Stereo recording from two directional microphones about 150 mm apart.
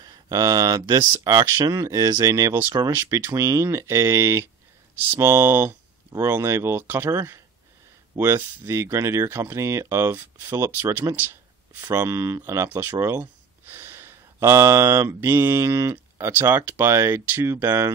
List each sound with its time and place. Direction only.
0.0 s speech: 25° right (ahead or behind)